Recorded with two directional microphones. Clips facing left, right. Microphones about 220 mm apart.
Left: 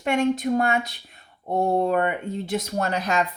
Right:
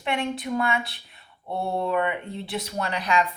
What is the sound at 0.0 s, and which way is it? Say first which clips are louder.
Speech: left 6 dB; 45° left (ahead or behind).